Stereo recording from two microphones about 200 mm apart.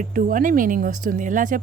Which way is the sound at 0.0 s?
40° right (ahead or behind).